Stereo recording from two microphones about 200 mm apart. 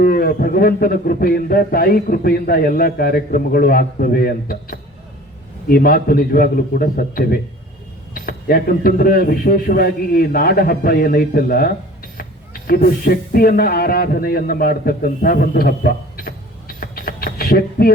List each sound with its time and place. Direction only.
0.0 s a man's voice: 50° left (ahead or behind)